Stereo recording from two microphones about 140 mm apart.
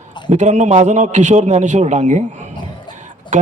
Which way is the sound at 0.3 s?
55° right (ahead or behind).